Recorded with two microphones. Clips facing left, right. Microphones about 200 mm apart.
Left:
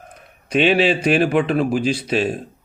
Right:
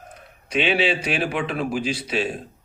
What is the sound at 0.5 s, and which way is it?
Speech, 45° left (ahead or behind).